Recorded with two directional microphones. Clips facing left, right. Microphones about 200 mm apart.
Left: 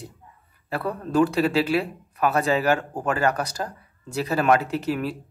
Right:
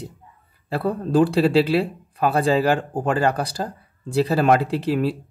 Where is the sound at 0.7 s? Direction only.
30° right (ahead or behind).